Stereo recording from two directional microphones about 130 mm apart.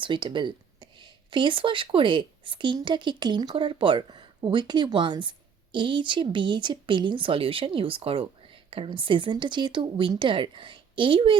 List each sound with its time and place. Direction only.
0.0 s speech: 40° right (ahead or behind)